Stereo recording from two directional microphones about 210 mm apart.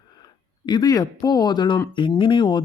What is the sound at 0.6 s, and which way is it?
Speech, 20° left (ahead or behind).